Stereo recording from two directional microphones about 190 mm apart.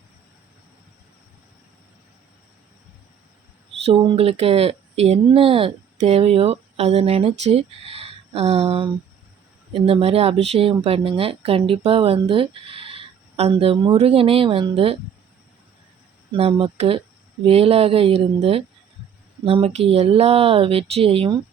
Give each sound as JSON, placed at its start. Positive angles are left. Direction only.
{"t": 3.8, "sound": "speech", "side_deg": -30}
{"t": 16.4, "sound": "speech", "side_deg": -30}